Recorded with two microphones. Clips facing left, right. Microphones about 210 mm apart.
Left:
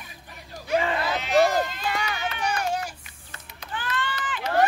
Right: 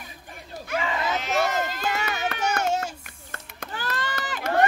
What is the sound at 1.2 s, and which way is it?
Run, 45° right (ahead or behind).